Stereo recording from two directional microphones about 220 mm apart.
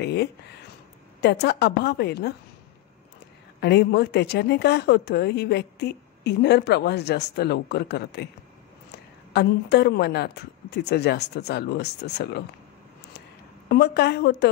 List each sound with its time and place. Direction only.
0.0 s a sound: 50° left (ahead or behind)
1.2 s a woman's voice: 50° left (ahead or behind)
3.6 s a woman's voice: 50° left (ahead or behind)
13.7 s a woman's voice: 50° left (ahead or behind)